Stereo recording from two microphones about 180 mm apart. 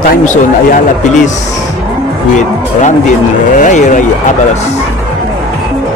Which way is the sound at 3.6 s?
45° left (ahead or behind).